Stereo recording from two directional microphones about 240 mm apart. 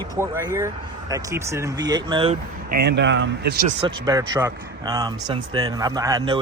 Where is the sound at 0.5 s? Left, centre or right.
Centre.